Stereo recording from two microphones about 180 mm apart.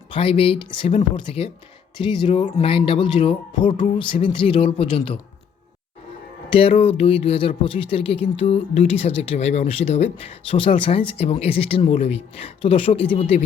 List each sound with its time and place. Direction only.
0.1 s speech: 30° left (ahead or behind)
6.5 s speech: 30° left (ahead or behind)